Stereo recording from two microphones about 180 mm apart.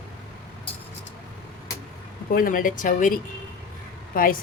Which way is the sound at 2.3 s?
50° left (ahead or behind).